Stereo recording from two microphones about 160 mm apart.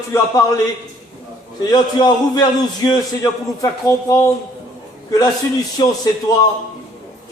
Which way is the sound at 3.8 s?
20° left (ahead or behind).